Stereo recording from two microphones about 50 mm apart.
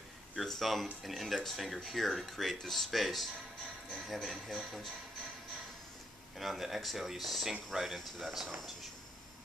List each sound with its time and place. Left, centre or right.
0.4 s speech: centre
6.3 s speech: centre